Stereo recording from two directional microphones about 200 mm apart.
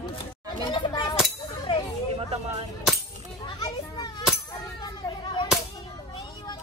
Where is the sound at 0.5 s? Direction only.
25° left (ahead or behind).